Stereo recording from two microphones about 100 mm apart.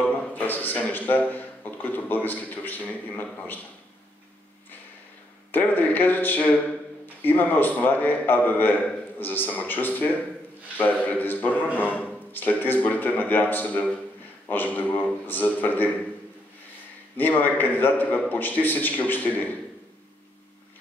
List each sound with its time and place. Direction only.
0.3 s a man's voice: 15° left (ahead or behind)
5.5 s a man's voice: 20° left (ahead or behind)
17.2 s a man's voice: 20° left (ahead or behind)